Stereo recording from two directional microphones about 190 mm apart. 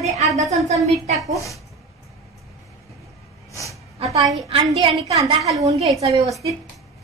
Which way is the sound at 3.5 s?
15° left (ahead or behind).